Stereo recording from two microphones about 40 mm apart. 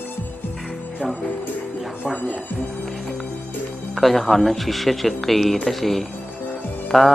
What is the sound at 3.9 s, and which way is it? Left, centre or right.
Speech, centre.